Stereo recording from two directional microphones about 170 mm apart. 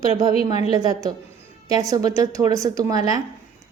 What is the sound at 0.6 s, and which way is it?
A woman's voice, 20° right (ahead or behind).